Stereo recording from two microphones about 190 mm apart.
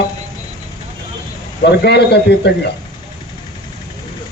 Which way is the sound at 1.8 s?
60° left (ahead or behind).